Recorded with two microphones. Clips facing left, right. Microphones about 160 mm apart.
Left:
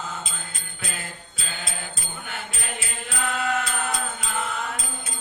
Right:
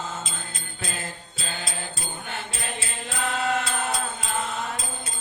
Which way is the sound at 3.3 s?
30° right (ahead or behind).